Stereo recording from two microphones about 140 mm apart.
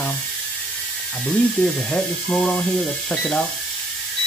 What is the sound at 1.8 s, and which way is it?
Speech, 10° left (ahead or behind).